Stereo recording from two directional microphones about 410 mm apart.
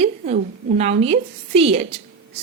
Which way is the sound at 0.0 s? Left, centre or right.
Centre.